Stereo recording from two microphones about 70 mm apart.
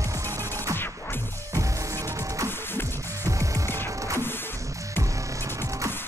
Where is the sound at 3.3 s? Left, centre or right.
Right.